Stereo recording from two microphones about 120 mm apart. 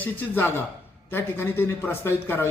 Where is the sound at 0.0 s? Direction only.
15° left (ahead or behind).